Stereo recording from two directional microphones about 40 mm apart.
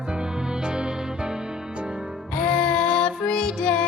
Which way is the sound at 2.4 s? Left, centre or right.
Left.